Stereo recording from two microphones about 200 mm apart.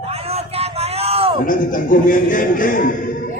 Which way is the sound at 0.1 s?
30° right (ahead or behind).